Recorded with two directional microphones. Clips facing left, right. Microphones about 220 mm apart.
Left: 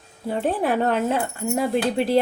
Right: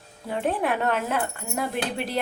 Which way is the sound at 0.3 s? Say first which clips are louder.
Left 3 dB; 35° left (ahead or behind).